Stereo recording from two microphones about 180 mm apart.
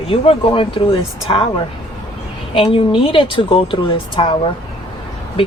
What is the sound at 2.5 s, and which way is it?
Speech, 30° left (ahead or behind).